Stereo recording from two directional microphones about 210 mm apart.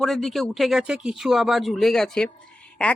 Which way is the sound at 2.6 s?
5° left (ahead or behind).